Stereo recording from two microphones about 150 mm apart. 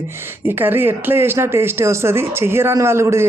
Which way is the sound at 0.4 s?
15° right (ahead or behind).